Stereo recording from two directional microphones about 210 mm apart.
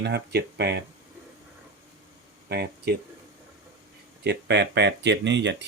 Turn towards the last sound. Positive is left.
turn(degrees=-55)  # may be behind; listen again after turning